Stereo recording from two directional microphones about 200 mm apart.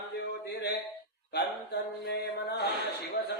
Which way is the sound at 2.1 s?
55° left (ahead or behind).